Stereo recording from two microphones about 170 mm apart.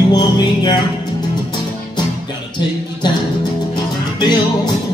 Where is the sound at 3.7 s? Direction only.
25° left (ahead or behind).